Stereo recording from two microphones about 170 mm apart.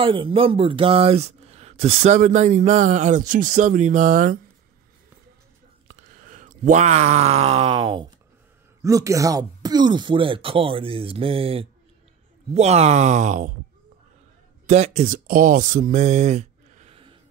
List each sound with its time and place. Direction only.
0.0 s speech: 30° right (ahead or behind); by 4.4 s 50° right (ahead or behind)
6.0 s speech: 50° right (ahead or behind); by 8.1 s 30° right (ahead or behind)
8.8 s speech: 20° right (ahead or behind); by 13.5 s 45° right (ahead or behind)
14.7 s speech: 40° right (ahead or behind)